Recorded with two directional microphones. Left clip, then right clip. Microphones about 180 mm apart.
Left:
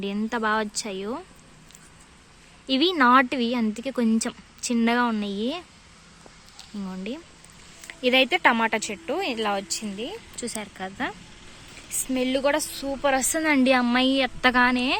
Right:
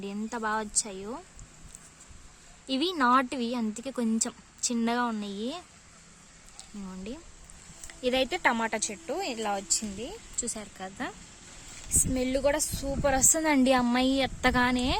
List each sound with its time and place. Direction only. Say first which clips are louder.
0.0 s speech: left 7 dB; centre (ahead or behind)
2.6 s speech: left 6 dB; centre (ahead or behind)
6.8 s a woman's voice: left 7 dB; centre (ahead or behind); by 14.9 s 15° right (ahead or behind)